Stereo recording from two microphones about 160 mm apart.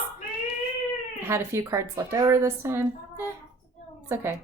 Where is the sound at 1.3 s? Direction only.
15° right (ahead or behind).